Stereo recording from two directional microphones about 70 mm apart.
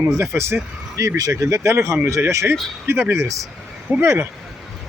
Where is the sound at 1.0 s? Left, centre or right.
Right.